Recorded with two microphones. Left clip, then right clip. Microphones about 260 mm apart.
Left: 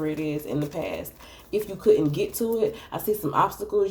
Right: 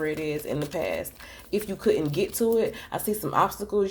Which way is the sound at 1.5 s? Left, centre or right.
Right.